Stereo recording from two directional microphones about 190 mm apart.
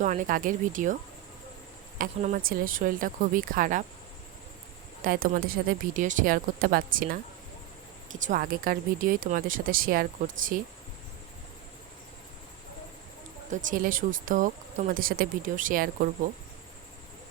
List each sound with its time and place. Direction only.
0.0 s speech: 40° right (ahead or behind)
2.0 s speech: 45° right (ahead or behind)
5.0 s speech: 45° right (ahead or behind)
13.5 s speech: 45° right (ahead or behind)